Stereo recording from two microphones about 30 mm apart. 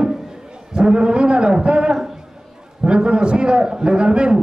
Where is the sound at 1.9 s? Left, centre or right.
Centre.